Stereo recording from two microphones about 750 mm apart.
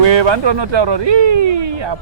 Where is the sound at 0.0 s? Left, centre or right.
Right.